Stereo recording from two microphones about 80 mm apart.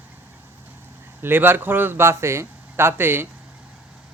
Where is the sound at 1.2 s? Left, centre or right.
Right.